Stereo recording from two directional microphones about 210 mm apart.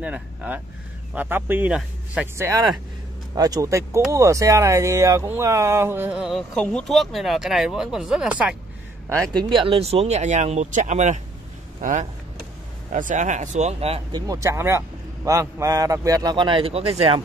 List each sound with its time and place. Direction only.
0.0 s speech: 5° right (ahead or behind)
9.5 s speech: 25° right (ahead or behind)